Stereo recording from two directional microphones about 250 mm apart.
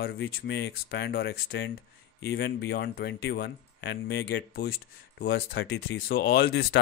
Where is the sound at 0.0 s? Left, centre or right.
Left.